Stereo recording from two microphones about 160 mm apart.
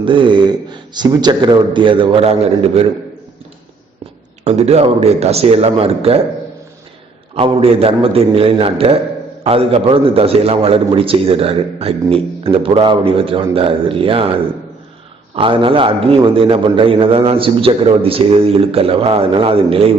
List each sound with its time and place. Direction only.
0.0 s a man's voice: 30° right (ahead or behind)
4.4 s a man's voice: 40° right (ahead or behind)
7.3 s a man's voice: 35° right (ahead or behind)
15.4 s a man's voice: 35° right (ahead or behind)